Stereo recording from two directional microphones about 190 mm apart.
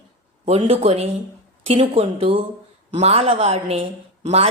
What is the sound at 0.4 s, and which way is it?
A woman's voice, 30° right (ahead or behind).